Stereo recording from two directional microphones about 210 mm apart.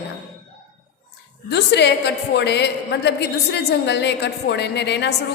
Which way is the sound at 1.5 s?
55° left (ahead or behind).